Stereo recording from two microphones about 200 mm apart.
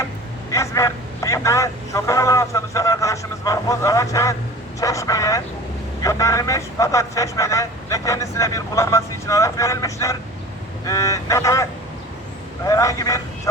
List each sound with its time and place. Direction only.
0.5 s speech: 15° left (ahead or behind)